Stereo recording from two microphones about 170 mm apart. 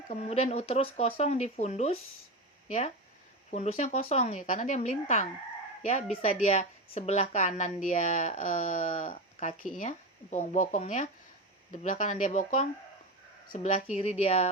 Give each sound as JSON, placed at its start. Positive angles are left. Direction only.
{"t": 0.1, "sound": "speech", "side_deg": 40}
{"t": 9.1, "sound": "speech", "side_deg": 40}
{"t": 13.9, "sound": "speech", "side_deg": 40}